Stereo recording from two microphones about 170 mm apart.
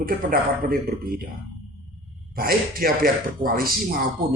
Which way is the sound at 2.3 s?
60° right (ahead or behind).